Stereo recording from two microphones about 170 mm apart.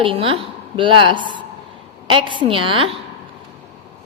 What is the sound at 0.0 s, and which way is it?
A woman's voice, 30° right (ahead or behind).